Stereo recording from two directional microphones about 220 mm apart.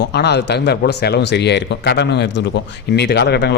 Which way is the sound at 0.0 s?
50° left (ahead or behind).